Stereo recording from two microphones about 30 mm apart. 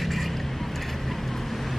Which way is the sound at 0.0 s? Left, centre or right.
Centre.